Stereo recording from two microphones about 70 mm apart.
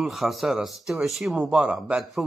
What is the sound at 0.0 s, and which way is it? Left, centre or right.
Speech, centre.